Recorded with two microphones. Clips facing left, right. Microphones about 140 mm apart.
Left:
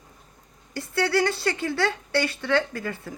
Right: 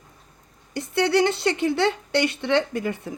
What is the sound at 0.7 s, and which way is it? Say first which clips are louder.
A woman's voice: right 3 dB; 20° right (ahead or behind).